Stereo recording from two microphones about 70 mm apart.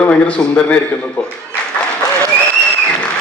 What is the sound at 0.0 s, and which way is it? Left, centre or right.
Speech, centre.